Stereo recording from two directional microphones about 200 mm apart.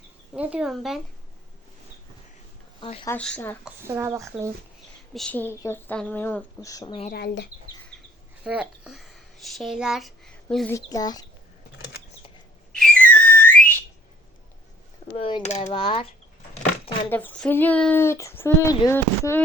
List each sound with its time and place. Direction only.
0.3 s speech: 5° right (ahead or behind)
2.8 s speech: 30° left (ahead or behind)
3.1 s speech: 5° left (ahead or behind)
3.8 s speech: 15° right (ahead or behind)
5.1 s speech: 5° left (ahead or behind)
7.1 s speech: 55° left (ahead or behind)
8.4 s a child's voice: 5° right (ahead or behind)
10.7 s speech: 15° left (ahead or behind)
12.7 s whistle: 5° left (ahead or behind)
15.1 s speech: 30° left (ahead or behind)
17.1 s speech: 10° left (ahead or behind)